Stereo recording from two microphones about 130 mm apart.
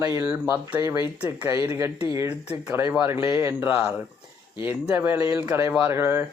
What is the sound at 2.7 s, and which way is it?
Speech, 15° right (ahead or behind).